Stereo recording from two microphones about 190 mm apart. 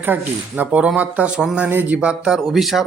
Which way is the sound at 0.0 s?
10° right (ahead or behind).